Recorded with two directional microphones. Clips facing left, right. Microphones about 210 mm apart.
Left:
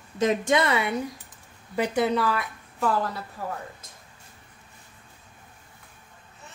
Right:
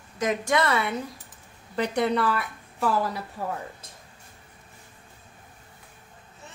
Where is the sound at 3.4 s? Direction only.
25° right (ahead or behind).